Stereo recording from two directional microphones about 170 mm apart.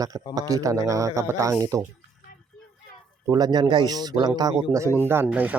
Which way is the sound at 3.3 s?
25° right (ahead or behind).